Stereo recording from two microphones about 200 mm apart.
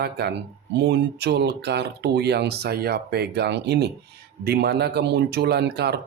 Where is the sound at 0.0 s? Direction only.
55° right (ahead or behind).